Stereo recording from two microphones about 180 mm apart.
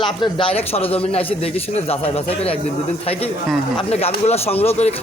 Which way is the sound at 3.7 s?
35° left (ahead or behind).